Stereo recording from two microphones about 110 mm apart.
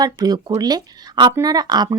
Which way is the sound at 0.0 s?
40° right (ahead or behind).